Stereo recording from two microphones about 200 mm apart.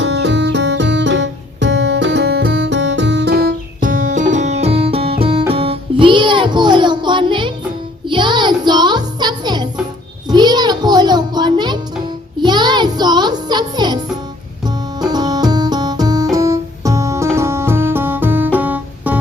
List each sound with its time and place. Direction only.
0.0 s music: 60° right (ahead or behind); by 14.0 s 20° right (ahead or behind)
15.0 s music: 20° right (ahead or behind)